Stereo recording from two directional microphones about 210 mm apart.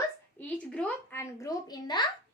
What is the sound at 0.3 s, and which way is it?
A woman's voice, 5° left (ahead or behind).